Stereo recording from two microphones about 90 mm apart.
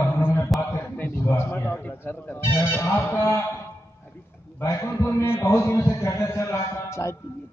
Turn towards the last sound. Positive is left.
turn(degrees=30)  # may be behind; listen again after turning